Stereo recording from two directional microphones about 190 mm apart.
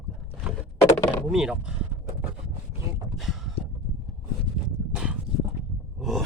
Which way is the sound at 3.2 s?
Centre (ahead or behind).